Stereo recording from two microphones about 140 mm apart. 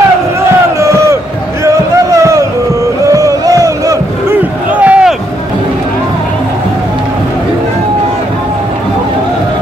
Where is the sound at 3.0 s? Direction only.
25° right (ahead or behind).